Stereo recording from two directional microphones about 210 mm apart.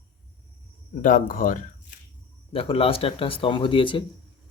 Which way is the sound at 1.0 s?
40° left (ahead or behind).